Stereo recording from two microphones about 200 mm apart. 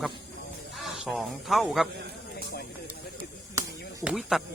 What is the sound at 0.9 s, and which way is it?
Speech, centre (ahead or behind).